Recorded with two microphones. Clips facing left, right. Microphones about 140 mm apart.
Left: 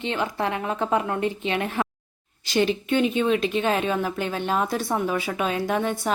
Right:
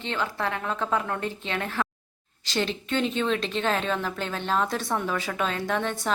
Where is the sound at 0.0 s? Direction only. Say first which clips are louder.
Left 3 dB; 15° left (ahead or behind).